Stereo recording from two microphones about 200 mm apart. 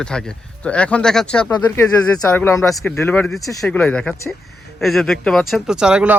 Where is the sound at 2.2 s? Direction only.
15° left (ahead or behind).